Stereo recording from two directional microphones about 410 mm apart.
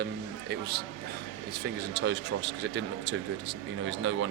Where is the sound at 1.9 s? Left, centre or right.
Right.